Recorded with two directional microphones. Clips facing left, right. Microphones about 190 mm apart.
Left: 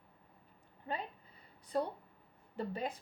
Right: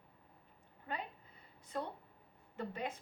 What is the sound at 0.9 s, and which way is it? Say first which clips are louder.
Speech: left 3 dB; 30° left (ahead or behind).